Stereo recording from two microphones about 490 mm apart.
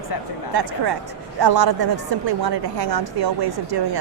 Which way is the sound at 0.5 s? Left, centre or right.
Right.